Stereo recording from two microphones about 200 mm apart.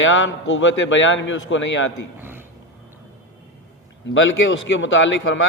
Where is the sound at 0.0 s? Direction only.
75° left (ahead or behind).